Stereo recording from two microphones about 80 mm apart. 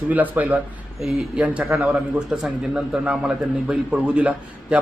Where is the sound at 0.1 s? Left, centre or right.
Right.